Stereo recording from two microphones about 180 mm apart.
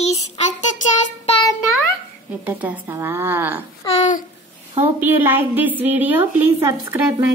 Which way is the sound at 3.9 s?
40° left (ahead or behind).